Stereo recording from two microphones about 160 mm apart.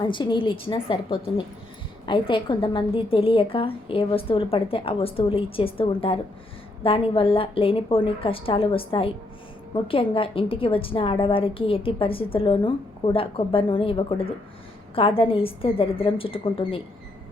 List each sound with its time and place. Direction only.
0.0 s a woman's voice: 30° left (ahead or behind)